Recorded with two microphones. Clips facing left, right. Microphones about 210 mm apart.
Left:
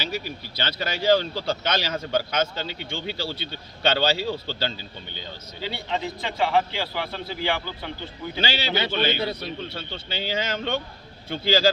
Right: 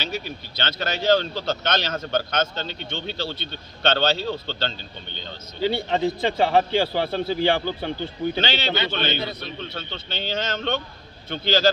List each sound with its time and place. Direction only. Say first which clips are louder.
0.0 s speech: even; 5° left (ahead or behind)
5.7 s a man's voice: right 6 dB; 30° right (ahead or behind)
8.4 s speech: left 3 dB; 10° left (ahead or behind)